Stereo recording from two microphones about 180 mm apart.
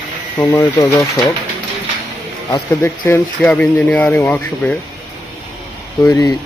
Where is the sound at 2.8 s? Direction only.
15° left (ahead or behind).